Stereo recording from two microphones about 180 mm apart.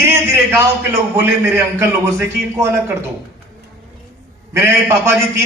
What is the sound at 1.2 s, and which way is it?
A man's voice, 15° right (ahead or behind).